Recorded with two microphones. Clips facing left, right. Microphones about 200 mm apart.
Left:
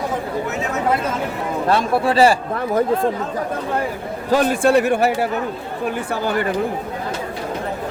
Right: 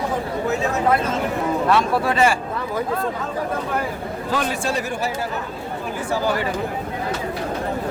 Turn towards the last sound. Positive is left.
turn(degrees=55)  # may be behind; listen again after turning